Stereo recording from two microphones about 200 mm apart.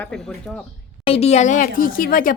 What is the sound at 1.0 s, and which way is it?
A woman's voice, 30° left (ahead or behind).